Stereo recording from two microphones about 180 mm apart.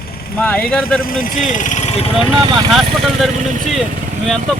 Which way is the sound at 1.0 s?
50° left (ahead or behind).